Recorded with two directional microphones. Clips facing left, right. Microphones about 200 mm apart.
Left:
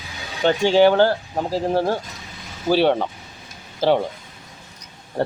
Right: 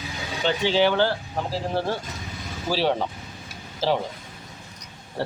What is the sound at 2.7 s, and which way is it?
Speech, 60° left (ahead or behind).